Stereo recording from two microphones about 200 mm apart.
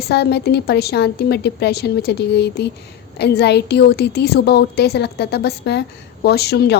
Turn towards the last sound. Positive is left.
turn(degrees=55)  # may be behind; listen again after turning